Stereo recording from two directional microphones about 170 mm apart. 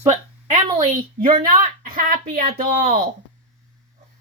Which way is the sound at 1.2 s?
30° right (ahead or behind).